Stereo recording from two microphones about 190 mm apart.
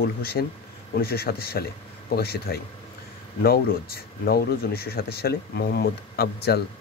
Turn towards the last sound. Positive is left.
turn(degrees=55)  # may be behind; listen again after turning